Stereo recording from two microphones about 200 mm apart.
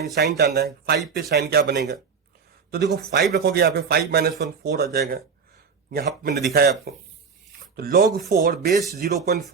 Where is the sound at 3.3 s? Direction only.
50° right (ahead or behind).